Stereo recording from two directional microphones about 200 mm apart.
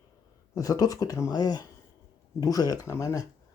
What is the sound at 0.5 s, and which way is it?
Speech, 15° left (ahead or behind).